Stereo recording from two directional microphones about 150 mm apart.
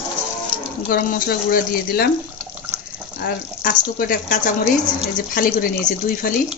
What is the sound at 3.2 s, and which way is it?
Speech, 70° left (ahead or behind).